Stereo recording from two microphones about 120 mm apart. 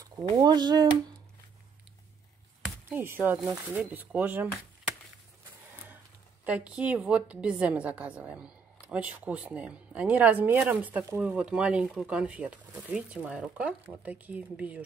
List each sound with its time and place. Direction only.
0.4 s speech: 35° right (ahead or behind)
2.9 s a woman's voice: 15° right (ahead or behind)
6.4 s a woman's voice: 10° right (ahead or behind)